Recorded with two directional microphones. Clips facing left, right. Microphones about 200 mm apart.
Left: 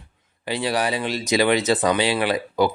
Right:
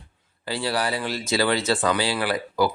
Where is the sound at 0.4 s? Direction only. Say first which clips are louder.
Left 3 dB; 20° left (ahead or behind).